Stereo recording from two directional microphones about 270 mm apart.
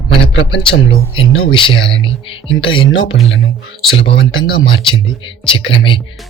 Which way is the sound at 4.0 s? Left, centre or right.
Left.